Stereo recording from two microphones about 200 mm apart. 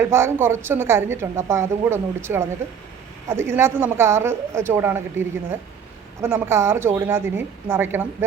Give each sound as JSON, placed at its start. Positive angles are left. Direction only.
{"t": 0.0, "sound": "a woman's voice", "side_deg": -10}